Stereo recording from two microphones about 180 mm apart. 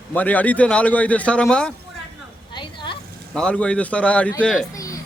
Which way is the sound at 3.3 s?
5° left (ahead or behind).